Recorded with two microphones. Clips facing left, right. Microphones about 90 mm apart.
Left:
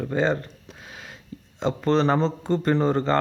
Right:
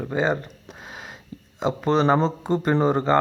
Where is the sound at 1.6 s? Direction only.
10° right (ahead or behind).